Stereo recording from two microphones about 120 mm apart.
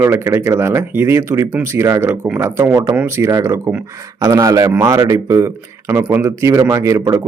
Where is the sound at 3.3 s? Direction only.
25° right (ahead or behind).